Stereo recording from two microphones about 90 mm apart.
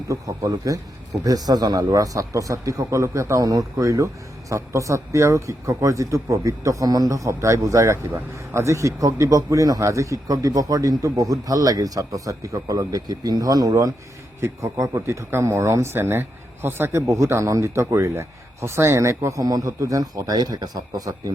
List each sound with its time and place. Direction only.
0.1 s speech: 40° right (ahead or behind)